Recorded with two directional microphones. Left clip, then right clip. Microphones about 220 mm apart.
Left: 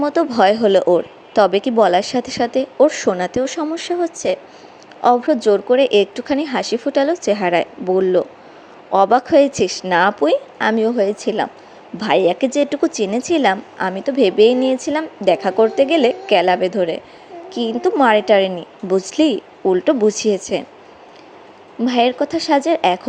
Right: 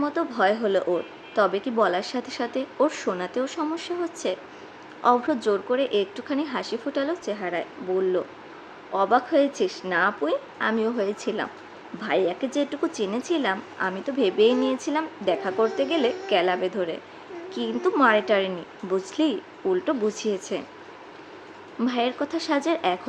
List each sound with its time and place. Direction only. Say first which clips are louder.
0.0 s speech: left 9 dB; 30° left (ahead or behind)
21.8 s speech: left 10 dB; 25° left (ahead or behind)